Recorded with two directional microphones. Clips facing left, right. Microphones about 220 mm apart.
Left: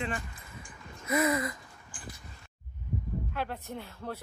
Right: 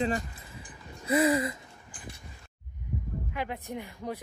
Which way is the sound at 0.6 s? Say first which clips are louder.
Right 1 dB; 30° right (ahead or behind).